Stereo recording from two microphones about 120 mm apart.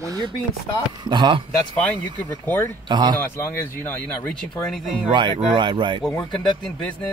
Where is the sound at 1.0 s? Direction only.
40° right (ahead or behind).